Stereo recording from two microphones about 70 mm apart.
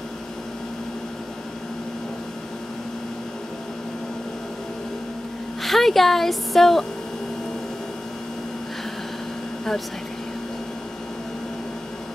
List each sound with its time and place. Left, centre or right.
5.6 s speech: centre